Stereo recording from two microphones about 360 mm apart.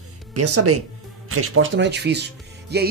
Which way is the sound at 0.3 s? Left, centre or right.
Right.